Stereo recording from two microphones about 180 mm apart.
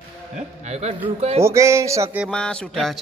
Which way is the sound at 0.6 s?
35° right (ahead or behind).